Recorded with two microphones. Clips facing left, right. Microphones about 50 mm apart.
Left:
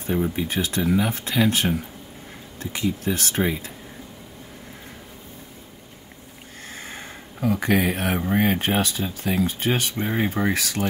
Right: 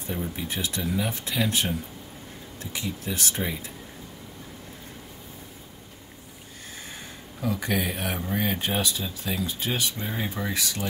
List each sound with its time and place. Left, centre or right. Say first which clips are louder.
0.0 s speech: left 8 dB; left
6.9 s a sound: left 4 dB; left
8.3 s speech: left 6 dB; left